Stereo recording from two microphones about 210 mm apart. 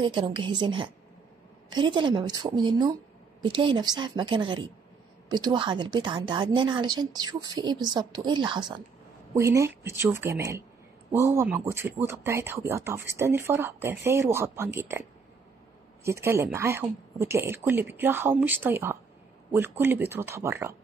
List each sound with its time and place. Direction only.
0.0 s a woman's voice: 25° right (ahead or behind)